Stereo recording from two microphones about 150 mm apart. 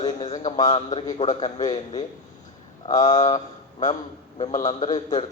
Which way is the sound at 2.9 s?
25° left (ahead or behind).